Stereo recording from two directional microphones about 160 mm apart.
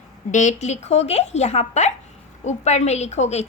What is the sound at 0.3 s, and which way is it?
A woman's voice, 50° left (ahead or behind).